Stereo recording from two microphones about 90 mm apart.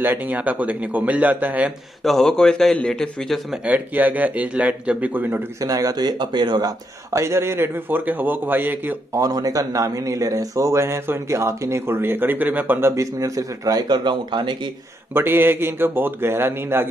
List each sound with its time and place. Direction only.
0.0 s speech: 20° right (ahead or behind)
2.0 s a man's voice: 5° left (ahead or behind)
3.6 s speech: 20° right (ahead or behind)
5.6 s a man's voice: 40° right (ahead or behind)
7.1 s a man's voice: 30° right (ahead or behind)
9.1 s a man's voice: 40° right (ahead or behind); by 12.9 s 20° right (ahead or behind)
12.9 s a man's voice: 35° right (ahead or behind); by 14.7 s 60° right (ahead or behind)
15.1 s a man's voice: 25° right (ahead or behind)